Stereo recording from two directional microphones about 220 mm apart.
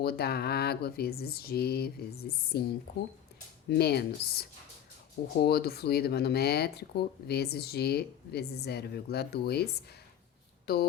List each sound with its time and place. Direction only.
0.0 s speech: 45° left (ahead or behind)